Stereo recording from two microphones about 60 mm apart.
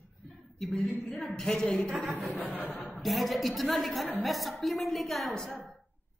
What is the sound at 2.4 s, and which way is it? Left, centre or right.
Speech, left.